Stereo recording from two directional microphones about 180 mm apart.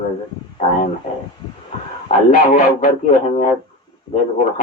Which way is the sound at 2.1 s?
40° left (ahead or behind).